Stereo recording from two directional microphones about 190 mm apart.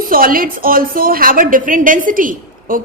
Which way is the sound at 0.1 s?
50° right (ahead or behind).